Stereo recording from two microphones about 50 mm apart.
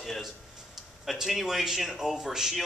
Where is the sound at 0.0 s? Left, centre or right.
Centre.